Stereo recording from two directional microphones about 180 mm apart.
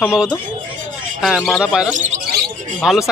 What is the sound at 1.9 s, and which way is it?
Speech, 40° right (ahead or behind).